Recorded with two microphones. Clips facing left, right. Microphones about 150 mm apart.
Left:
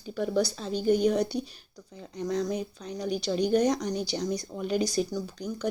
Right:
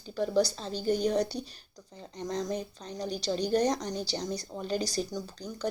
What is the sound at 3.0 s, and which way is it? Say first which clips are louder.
Speech: left 4 dB; 35° right (ahead or behind).